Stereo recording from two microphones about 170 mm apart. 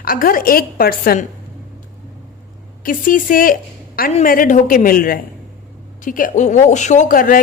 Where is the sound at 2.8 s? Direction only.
55° left (ahead or behind).